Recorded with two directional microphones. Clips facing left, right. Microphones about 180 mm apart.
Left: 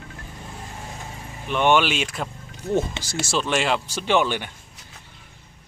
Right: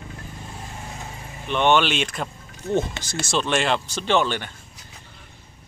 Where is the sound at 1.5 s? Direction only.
10° left (ahead or behind).